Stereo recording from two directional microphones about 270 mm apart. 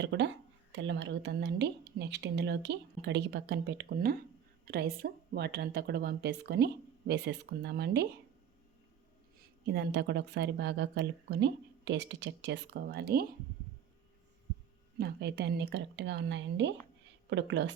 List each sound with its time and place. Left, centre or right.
0.0 s speech: right
9.6 s speech: right
14.9 s speech: right